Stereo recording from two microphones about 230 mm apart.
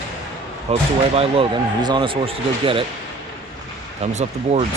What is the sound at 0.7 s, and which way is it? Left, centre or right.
Speech, right.